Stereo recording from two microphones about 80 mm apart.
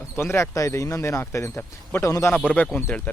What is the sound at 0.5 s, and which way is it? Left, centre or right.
Speech, left.